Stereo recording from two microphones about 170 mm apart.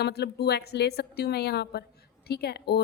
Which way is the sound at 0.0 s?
75° left (ahead or behind).